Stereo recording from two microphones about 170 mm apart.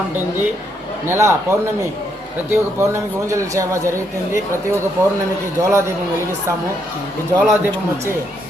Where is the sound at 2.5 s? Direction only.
15° right (ahead or behind).